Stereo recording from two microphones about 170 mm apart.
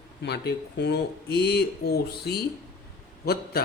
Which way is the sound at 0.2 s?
80° left.